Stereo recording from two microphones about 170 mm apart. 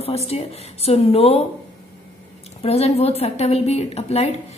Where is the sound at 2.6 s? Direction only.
35° left (ahead or behind).